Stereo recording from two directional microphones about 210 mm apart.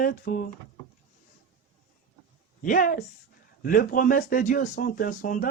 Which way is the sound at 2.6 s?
40° left (ahead or behind).